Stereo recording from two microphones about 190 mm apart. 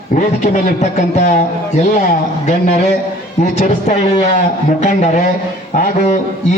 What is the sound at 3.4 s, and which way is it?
Speech, 40° left (ahead or behind).